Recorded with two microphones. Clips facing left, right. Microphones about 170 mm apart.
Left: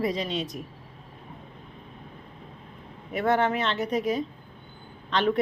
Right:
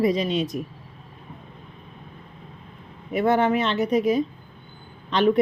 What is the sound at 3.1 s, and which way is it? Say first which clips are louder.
Speech: right 4 dB; 10° right (ahead or behind).